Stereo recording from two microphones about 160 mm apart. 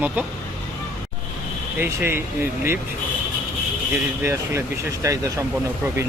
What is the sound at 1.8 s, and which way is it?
Speech, 15° right (ahead or behind).